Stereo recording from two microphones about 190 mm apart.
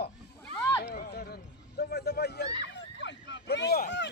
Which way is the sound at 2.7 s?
75° left (ahead or behind).